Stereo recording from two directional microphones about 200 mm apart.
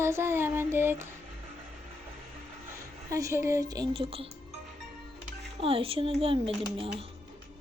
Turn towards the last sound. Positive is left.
turn(degrees=-25)  # may be behind; listen again after turning